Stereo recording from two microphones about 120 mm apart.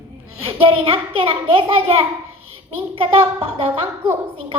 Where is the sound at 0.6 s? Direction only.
50° right (ahead or behind).